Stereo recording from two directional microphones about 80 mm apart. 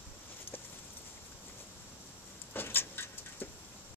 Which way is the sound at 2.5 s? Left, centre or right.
Left.